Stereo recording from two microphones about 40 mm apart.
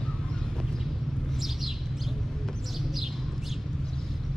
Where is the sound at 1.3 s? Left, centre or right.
Centre.